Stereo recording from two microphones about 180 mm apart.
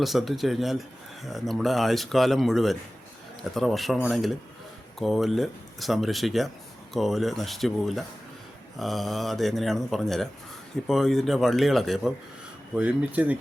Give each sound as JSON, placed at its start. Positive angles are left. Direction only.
{"t": 0.0, "sound": "speech", "side_deg": 0}